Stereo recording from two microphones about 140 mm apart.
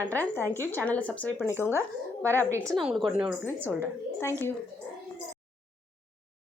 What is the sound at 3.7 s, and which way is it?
Speech, 15° left (ahead or behind).